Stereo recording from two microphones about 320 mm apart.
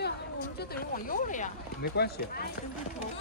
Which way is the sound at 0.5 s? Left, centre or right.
Left.